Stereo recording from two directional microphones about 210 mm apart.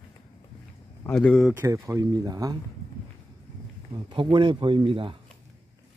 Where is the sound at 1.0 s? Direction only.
5° left (ahead or behind).